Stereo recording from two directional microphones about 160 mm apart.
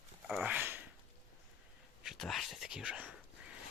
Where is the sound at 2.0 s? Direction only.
Centre (ahead or behind).